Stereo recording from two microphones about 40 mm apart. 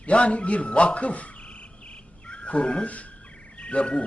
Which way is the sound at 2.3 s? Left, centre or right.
Left.